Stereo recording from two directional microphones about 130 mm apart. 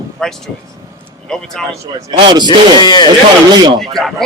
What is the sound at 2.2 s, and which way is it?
Speech, 35° right (ahead or behind).